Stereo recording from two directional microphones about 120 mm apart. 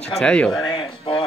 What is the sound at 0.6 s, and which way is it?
Music, 40° left (ahead or behind).